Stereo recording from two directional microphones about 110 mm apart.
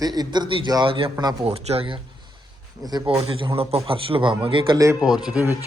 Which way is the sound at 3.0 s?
55° right (ahead or behind).